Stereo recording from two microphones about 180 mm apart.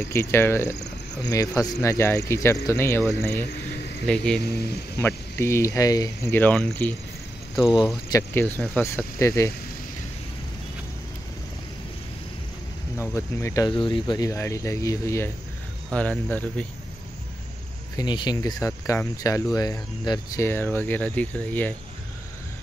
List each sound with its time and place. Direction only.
0.0 s speech: 15° left (ahead or behind)
4.4 s speech: 65° left (ahead or behind)
4.9 s speech: 15° left (ahead or behind)
8.1 s speech: 15° left (ahead or behind)
13.1 s speech: 15° left (ahead or behind)
17.9 s speech: 25° left (ahead or behind)